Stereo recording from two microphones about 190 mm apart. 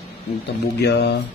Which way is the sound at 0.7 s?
60° left (ahead or behind).